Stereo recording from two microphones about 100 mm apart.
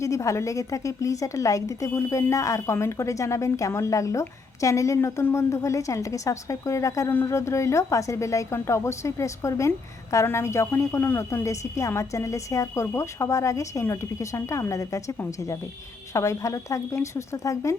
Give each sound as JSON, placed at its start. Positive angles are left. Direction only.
{"t": 0.0, "sound": "a woman's voice", "side_deg": 30}
{"t": 16.1, "sound": "a woman's voice", "side_deg": 30}